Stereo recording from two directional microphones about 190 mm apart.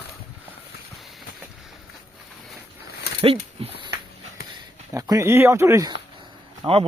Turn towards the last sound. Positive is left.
turn(degrees=-25)  # may be behind; listen again after turning